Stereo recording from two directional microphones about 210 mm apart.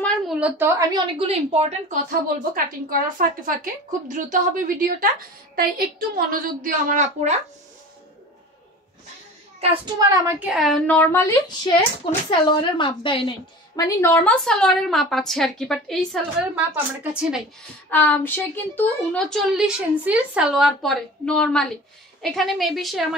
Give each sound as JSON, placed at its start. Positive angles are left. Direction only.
{"t": 0.0, "sound": "a sound", "side_deg": -5}
{"t": 1.1, "sound": "a woman's voice", "side_deg": -25}
{"t": 9.9, "sound": "a woman's voice", "side_deg": -15}
{"t": 10.5, "sound": "a woman's voice", "side_deg": 0}
{"t": 13.7, "sound": "a woman's voice", "side_deg": 15}
{"t": 17.8, "sound": "a woman's voice", "side_deg": 5}